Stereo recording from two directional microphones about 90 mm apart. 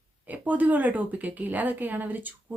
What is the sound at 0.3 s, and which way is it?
A woman's voice, 20° right (ahead or behind).